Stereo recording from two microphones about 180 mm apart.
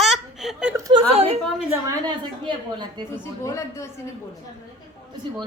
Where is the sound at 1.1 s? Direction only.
35° right (ahead or behind).